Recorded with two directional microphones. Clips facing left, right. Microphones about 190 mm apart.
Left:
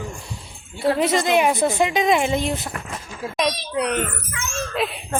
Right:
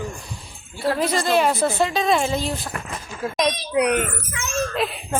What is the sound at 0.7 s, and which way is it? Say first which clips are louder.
Speech: left 2 dB; 20° left (ahead or behind).